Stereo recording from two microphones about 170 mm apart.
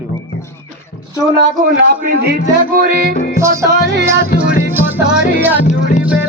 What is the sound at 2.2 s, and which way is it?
Speech, 65° right (ahead or behind).